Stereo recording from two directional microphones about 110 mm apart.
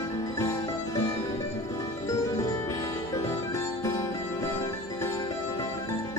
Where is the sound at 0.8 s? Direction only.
30° left (ahead or behind).